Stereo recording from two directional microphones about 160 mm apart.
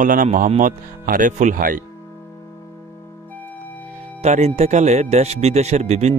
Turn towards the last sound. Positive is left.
turn(degrees=-45)  # may be behind; listen again after turning